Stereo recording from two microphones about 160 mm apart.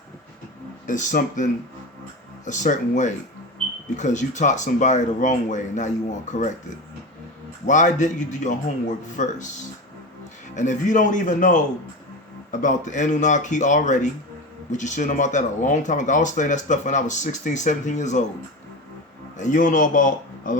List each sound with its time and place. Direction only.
0.9 s speech: 50° left (ahead or behind)
7.7 s speech: 50° left (ahead or behind)
10.5 s speech: 50° left (ahead or behind)
19.4 s a man's voice: 50° left (ahead or behind)